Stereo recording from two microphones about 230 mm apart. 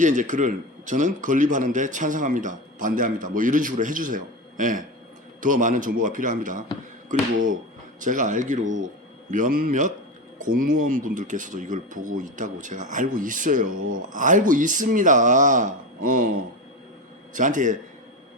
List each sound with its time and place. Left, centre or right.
0.0 s a man's voice: right
17.3 s a man's voice: right